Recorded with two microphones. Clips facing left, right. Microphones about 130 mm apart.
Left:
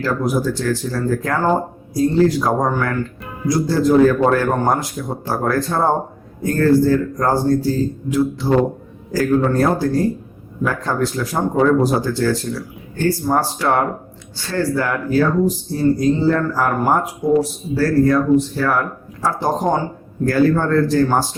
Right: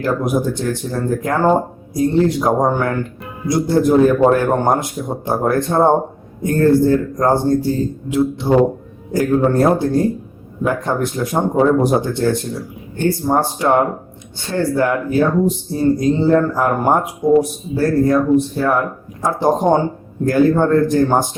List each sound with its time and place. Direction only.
0.0 s speech: 20° right (ahead or behind)